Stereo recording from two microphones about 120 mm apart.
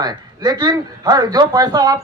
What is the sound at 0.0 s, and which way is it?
Speech, 35° right (ahead or behind).